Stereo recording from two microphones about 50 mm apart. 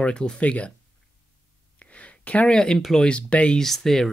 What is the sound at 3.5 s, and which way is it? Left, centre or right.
Speech, centre.